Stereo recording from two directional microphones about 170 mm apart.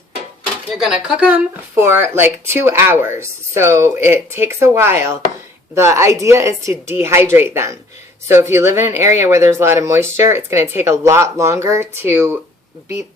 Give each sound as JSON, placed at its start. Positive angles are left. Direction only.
{"t": 0.8, "sound": "speech", "side_deg": -5}